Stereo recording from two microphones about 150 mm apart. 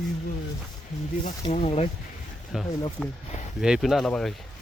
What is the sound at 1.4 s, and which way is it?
Speech, 40° left (ahead or behind).